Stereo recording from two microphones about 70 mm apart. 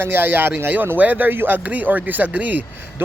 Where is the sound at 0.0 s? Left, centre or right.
Right.